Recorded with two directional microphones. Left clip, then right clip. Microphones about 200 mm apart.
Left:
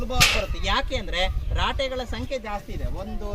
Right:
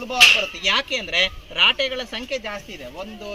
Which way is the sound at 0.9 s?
15° left (ahead or behind).